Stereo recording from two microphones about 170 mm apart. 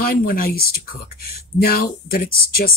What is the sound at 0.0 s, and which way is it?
Speech, 55° left (ahead or behind).